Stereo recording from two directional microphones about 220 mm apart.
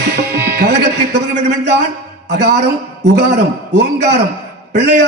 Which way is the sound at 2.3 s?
50° right (ahead or behind).